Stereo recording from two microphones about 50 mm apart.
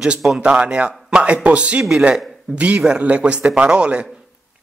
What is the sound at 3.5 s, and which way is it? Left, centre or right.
Speech, centre.